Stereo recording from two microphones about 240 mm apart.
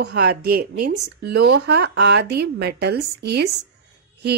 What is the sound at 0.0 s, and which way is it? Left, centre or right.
A woman's voice, right.